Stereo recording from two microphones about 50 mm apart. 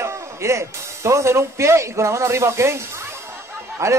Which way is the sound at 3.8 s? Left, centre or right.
Right.